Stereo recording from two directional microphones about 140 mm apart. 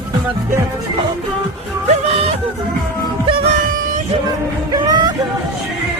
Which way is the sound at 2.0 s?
45° right (ahead or behind).